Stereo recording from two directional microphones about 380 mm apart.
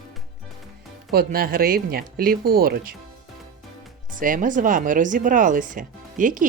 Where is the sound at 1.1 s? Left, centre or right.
Right.